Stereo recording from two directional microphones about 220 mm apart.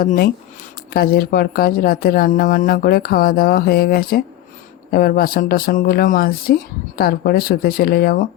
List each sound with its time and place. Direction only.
0.0 s speech: 40° left (ahead or behind)